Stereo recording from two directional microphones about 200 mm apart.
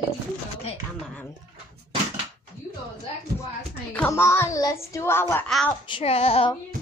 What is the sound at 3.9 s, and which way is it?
A child's voice, 10° left (ahead or behind).